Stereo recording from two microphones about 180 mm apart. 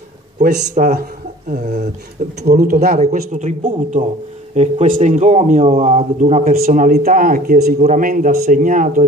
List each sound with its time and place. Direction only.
0.4 s speech: 55° right (ahead or behind)
1.5 s speech: 40° right (ahead or behind)
2.4 s a man's voice: 50° right (ahead or behind)
3.0 s a man's voice: 45° right (ahead or behind)